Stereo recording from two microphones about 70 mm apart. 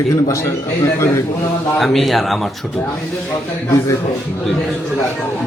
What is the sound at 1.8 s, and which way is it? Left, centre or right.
Speech, centre.